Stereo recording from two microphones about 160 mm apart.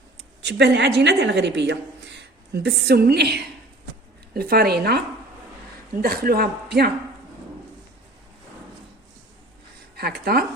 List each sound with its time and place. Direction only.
0.2 s a woman's voice: 90° right
4.4 s a man's voice: 70° right (ahead or behind)
6.0 s a man's voice: 70° right (ahead or behind)
9.9 s speech: 85° right